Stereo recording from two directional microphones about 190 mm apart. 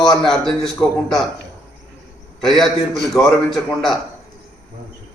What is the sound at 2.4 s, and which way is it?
A man's voice, centre (ahead or behind).